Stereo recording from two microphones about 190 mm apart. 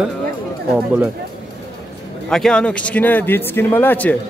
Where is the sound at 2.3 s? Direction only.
5° left (ahead or behind).